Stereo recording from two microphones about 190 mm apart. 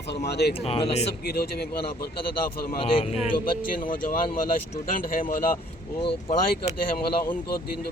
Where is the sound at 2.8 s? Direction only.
30° left (ahead or behind).